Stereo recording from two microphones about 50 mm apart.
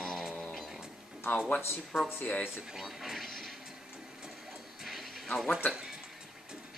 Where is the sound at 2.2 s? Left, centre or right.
Left.